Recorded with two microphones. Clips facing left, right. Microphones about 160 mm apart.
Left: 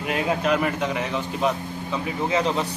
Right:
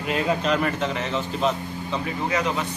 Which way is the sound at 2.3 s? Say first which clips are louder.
Left 3 dB; 30° left (ahead or behind).